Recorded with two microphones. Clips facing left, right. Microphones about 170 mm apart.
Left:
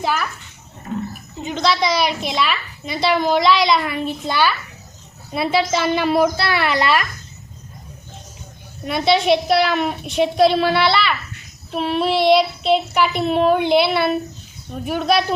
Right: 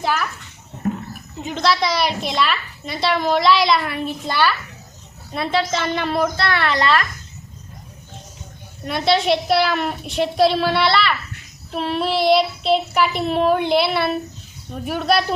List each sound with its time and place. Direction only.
0.0 s a child's voice: centre (ahead or behind)
0.8 s roaring cats: 55° right (ahead or behind)
1.4 s a woman's voice: centre (ahead or behind)
8.8 s a woman's voice: centre (ahead or behind)